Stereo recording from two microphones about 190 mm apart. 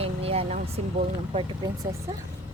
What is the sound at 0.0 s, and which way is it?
Speech, 30° right (ahead or behind).